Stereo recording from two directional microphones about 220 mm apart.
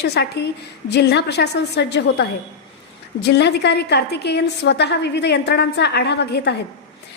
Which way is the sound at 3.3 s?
50° left (ahead or behind).